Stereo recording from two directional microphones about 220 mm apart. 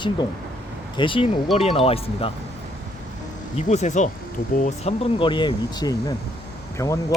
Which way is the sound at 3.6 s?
30° left (ahead or behind).